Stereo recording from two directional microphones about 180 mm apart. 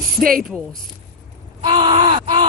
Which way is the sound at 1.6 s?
25° right (ahead or behind).